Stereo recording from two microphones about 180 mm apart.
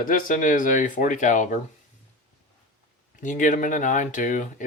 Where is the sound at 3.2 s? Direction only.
45° left (ahead or behind).